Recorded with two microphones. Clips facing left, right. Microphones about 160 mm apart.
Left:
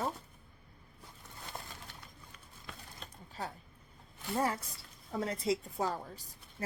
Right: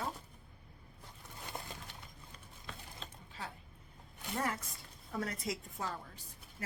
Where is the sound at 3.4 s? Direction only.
40° left (ahead or behind).